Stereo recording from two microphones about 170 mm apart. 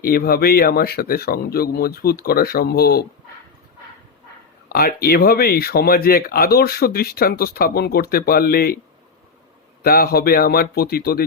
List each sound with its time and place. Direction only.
0.0 s speech: 60° left (ahead or behind)
4.7 s speech: 60° left (ahead or behind)
9.8 s speech: 60° left (ahead or behind)